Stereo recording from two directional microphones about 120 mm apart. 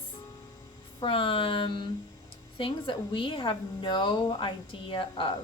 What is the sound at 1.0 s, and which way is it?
A woman's voice, 45° left (ahead or behind).